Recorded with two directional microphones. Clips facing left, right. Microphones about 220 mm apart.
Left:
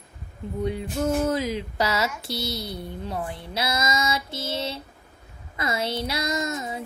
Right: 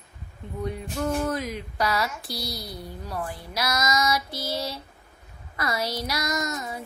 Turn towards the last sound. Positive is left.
turn(degrees=25)  # may be behind; listen again after turning